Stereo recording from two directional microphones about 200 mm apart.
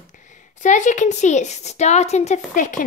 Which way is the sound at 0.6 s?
40° left (ahead or behind).